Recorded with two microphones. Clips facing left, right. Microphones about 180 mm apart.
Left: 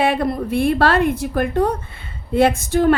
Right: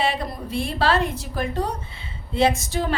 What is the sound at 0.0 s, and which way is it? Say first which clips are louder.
A woman's voice: left 7 dB; 55° left (ahead or behind).